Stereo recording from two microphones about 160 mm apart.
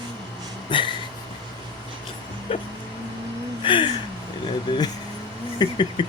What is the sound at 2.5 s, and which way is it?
Speech, 35° left (ahead or behind).